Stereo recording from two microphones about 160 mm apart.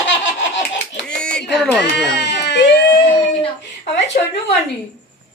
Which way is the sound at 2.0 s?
90° left.